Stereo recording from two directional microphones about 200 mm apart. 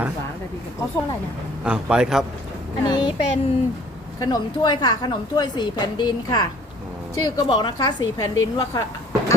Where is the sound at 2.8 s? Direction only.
20° left (ahead or behind).